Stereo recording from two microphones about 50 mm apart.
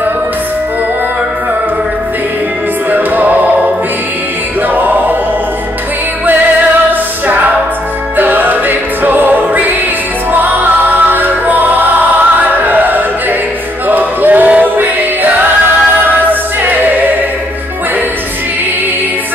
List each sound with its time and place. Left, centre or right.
2.9 s music: right
4.7 s music: right
6.9 s music: right
13.8 s choir: right
16.3 s music: right